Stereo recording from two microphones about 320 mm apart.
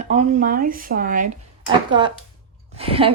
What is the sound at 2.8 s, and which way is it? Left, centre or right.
Speech, centre.